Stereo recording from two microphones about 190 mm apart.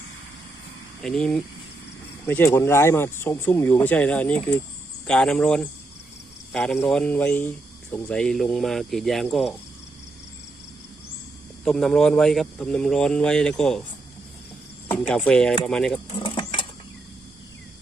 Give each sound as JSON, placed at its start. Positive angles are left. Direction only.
{"t": 1.0, "sound": "speech", "side_deg": 5}
{"t": 11.6, "sound": "speech", "side_deg": 0}
{"t": 14.9, "sound": "speech", "side_deg": 10}
{"t": 16.1, "sound": "mechanisms", "side_deg": 25}